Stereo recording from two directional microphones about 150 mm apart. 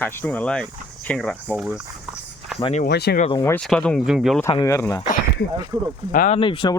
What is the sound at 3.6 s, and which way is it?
Speech, 5° left (ahead or behind).